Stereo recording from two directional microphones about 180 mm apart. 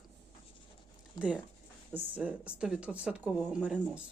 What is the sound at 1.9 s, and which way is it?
Speech, 10° right (ahead or behind).